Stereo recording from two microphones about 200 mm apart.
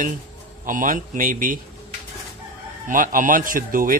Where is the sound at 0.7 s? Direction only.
40° right (ahead or behind).